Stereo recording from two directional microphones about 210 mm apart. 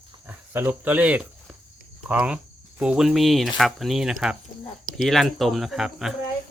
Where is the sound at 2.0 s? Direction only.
5° right (ahead or behind).